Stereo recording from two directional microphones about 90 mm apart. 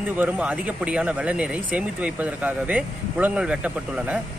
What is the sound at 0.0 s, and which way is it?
Speech, 20° right (ahead or behind).